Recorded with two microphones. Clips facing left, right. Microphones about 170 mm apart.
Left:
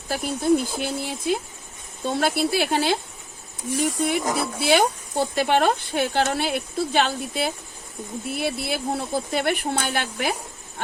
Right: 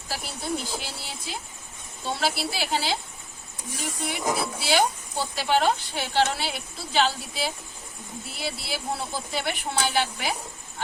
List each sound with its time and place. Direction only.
0.1 s speech: 55° left (ahead or behind)